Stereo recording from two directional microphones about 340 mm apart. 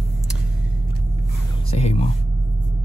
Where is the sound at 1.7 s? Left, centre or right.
Centre.